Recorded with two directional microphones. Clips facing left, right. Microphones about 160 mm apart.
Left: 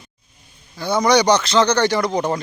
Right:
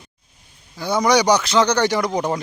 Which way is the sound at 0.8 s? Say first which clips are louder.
Left 1 dB; 10° right (ahead or behind).